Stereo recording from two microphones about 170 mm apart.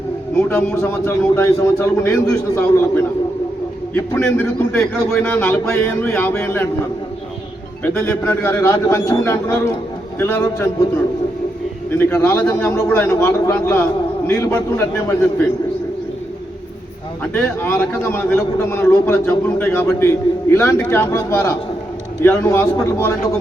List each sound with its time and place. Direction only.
0.4 s a man's voice: 15° left (ahead or behind)
8.3 s a man's voice: 15° left (ahead or behind)
11.9 s a man's voice: 15° left (ahead or behind)
17.3 s a man's voice: 10° left (ahead or behind)